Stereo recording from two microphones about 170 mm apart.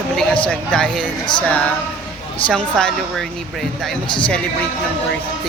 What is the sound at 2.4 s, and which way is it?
Speech, 5° left (ahead or behind).